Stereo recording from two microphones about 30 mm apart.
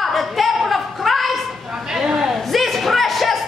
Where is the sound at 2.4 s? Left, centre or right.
Centre.